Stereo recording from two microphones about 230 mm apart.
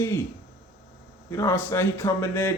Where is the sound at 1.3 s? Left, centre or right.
Centre.